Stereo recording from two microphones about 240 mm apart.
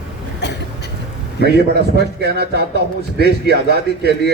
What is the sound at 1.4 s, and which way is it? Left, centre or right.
A man's voice, right.